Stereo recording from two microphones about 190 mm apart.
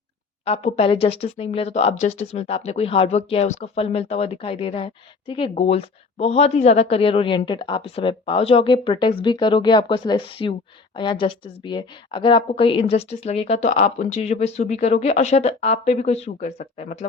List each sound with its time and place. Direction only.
0.4 s a woman's voice: 30° left (ahead or behind)